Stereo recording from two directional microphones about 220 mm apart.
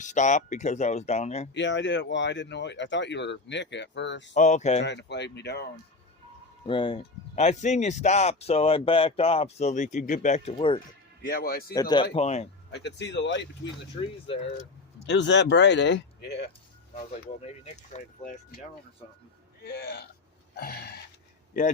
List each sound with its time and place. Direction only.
0.0 s speech: 35° left (ahead or behind)
1.5 s speech: 55° left (ahead or behind)
4.4 s speech: 35° left (ahead or behind)
4.8 s speech: 50° left (ahead or behind)
6.7 s speech: 25° left (ahead or behind)
11.3 s speech: 45° left (ahead or behind)
11.7 s speech: 20° left (ahead or behind)
12.1 s speech: 30° left (ahead or behind)
12.7 s speech: 50° left (ahead or behind)
15.0 s speech: 50° left (ahead or behind)
17.9 s speech: 35° left (ahead or behind)
19.6 s speech: 45° left (ahead or behind)